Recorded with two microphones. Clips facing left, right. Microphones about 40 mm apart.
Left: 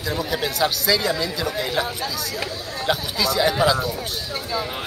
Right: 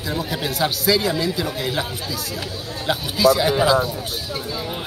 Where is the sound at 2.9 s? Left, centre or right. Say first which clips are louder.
Right 6 dB; centre.